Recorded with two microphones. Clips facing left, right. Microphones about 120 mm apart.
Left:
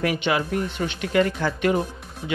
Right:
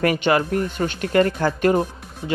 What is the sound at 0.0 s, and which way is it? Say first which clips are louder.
Speech: right 4 dB; 50° right (ahead or behind).